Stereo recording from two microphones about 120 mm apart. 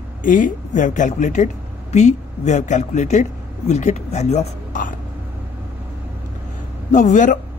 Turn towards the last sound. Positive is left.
turn(degrees=90)